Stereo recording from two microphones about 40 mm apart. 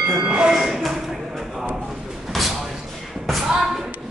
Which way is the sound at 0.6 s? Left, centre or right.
Centre.